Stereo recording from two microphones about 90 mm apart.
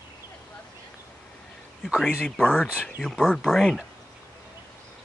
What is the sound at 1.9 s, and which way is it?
Speech, 10° right (ahead or behind).